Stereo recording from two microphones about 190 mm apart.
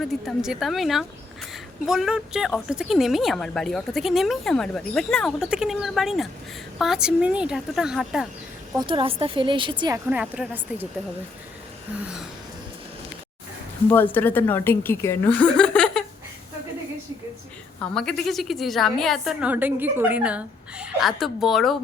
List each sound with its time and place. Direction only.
0.0 s a woman's voice: centre (ahead or behind)
8.7 s a woman's voice: 25° right (ahead or behind)
10.1 s speech: 5° right (ahead or behind)
13.9 s a woman's voice: 10° left (ahead or behind)
17.9 s a woman's voice: 5° left (ahead or behind)